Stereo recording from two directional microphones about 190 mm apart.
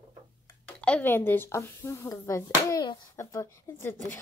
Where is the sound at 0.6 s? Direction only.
5° left (ahead or behind).